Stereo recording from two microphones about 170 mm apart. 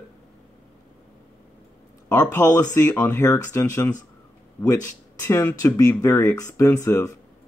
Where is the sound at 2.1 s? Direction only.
20° left (ahead or behind).